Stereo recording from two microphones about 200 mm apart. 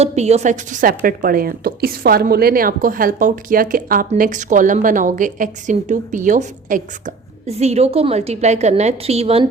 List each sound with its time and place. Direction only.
0.0 s a woman's voice: 35° right (ahead or behind)